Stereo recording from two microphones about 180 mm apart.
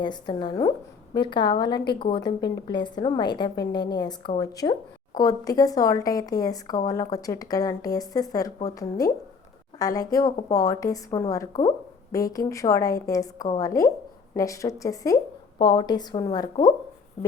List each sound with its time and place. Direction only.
0.0 s a woman's voice: 25° left (ahead or behind)